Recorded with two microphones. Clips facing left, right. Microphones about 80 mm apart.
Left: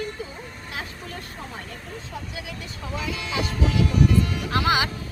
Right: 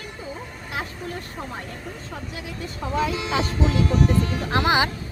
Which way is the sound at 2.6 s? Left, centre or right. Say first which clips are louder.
Right 9 dB; right.